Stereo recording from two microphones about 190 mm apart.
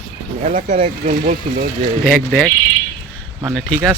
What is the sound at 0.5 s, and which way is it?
Speech, 45° right (ahead or behind).